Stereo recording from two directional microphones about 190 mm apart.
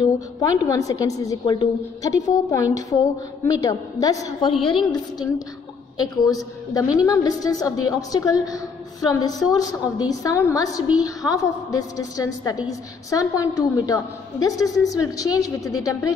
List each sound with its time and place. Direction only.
0.0 s a woman's voice: 20° left (ahead or behind)
5.9 s a woman's voice: 20° left (ahead or behind)